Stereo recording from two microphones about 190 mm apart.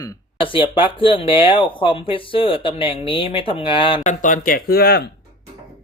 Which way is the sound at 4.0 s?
40° left (ahead or behind).